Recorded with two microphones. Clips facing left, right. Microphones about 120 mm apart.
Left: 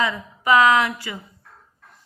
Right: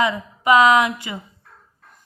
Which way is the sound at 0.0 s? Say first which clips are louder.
Right 3 dB; 20° right (ahead or behind).